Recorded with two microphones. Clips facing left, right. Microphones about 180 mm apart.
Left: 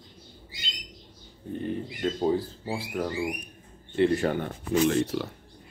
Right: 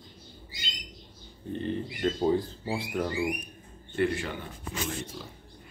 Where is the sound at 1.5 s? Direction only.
10° left (ahead or behind).